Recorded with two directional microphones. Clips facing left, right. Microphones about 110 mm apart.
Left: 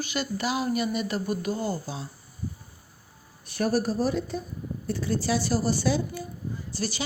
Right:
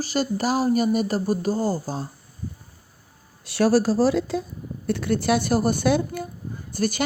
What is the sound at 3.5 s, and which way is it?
Speech, 90° right.